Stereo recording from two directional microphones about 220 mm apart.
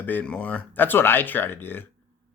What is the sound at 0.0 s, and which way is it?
Speech, 5° left (ahead or behind).